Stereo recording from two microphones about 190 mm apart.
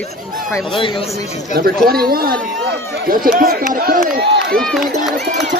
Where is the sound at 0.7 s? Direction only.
25° left (ahead or behind).